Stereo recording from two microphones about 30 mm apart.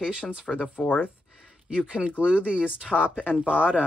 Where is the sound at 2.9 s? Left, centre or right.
Centre.